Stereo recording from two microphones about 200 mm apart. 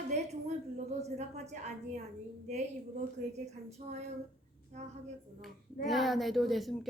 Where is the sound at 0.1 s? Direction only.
35° right (ahead or behind).